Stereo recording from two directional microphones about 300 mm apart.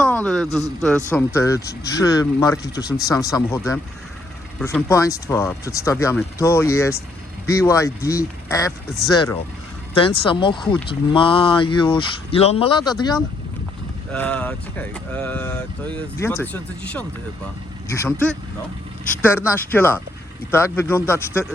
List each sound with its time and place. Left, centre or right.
0.0 s a man's voice: centre
9.9 s speech: centre
19.5 s speech: centre